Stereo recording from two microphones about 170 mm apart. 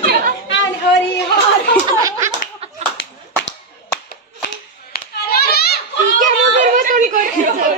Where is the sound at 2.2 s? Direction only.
45° right (ahead or behind).